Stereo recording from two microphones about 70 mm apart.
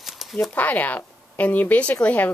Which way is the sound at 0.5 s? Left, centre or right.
Left.